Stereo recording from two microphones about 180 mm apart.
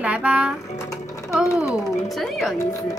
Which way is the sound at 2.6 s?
20° left (ahead or behind).